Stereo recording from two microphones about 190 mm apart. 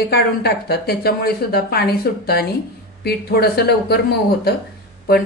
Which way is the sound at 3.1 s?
55° left (ahead or behind).